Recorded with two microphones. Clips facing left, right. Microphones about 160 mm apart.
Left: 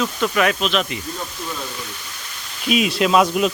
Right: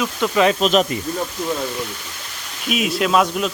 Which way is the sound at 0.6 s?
40° right (ahead or behind).